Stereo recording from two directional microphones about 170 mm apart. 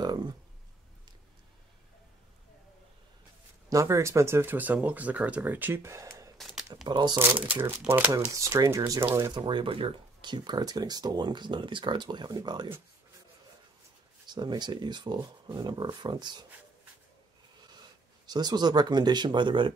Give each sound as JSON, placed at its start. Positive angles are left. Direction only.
{"t": 0.0, "sound": "a sound", "side_deg": -25}
{"t": 3.6, "sound": "speech", "side_deg": -20}
{"t": 6.3, "sound": "a sound", "side_deg": 0}
{"t": 6.9, "sound": "speech", "side_deg": -25}
{"t": 7.2, "sound": "speech", "side_deg": -10}
{"t": 14.3, "sound": "speech", "side_deg": -25}
{"t": 18.2, "sound": "speech", "side_deg": -25}